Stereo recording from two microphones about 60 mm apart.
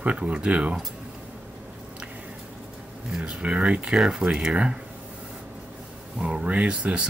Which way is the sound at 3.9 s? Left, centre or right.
Centre.